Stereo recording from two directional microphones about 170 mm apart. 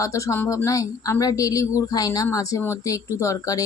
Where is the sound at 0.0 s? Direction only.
20° left (ahead or behind).